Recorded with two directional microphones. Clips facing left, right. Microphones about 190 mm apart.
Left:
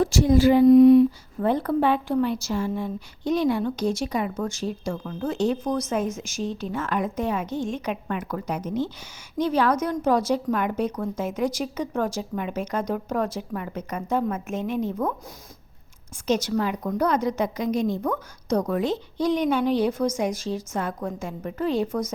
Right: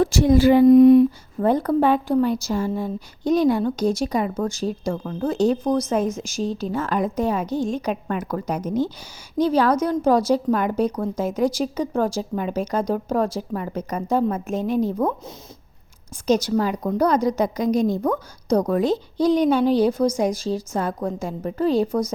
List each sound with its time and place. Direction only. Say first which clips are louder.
0.0 s speech: right 2 dB; 65° right (ahead or behind); by 15.1 s 35° right (ahead or behind)
16.2 s speech: right 4 dB; 35° right (ahead or behind)